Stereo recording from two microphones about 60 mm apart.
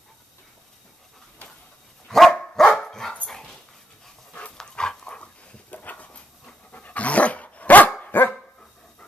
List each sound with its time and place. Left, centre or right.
2.0 s dog: centre
4.6 s dog: centre; by 8.4 s left